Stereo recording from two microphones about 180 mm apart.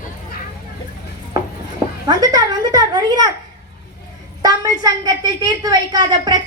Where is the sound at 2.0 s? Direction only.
20° right (ahead or behind).